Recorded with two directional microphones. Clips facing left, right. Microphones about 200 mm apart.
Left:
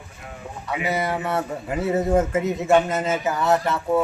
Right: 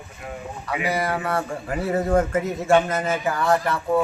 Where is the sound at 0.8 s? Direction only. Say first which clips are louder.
Even; 20° left (ahead or behind).